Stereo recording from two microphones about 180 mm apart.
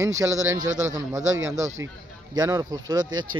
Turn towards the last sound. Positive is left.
turn(degrees=-20)  # may be behind; listen again after turning